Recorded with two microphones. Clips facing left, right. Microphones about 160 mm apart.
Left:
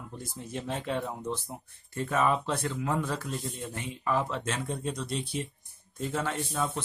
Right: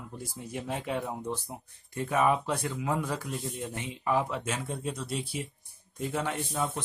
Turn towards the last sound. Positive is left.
turn(degrees=-15)  # may be behind; listen again after turning